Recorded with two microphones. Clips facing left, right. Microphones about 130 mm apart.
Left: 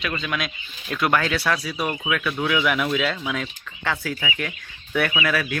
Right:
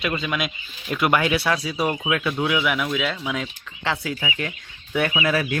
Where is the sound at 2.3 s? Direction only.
15° right (ahead or behind).